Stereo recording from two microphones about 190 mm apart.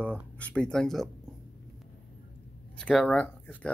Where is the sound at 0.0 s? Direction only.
5° left (ahead or behind).